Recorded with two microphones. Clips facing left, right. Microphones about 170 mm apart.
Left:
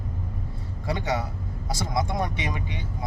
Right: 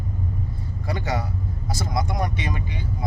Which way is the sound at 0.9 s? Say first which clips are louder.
Even; 20° left (ahead or behind).